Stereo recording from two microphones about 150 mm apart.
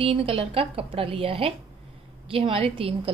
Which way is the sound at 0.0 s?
40° right (ahead or behind).